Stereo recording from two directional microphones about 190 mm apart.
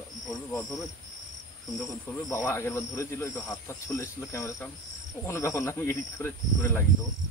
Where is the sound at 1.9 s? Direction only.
15° left (ahead or behind).